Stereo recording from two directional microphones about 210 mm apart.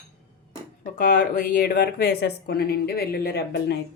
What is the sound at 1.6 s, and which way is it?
Speech, 45° left (ahead or behind).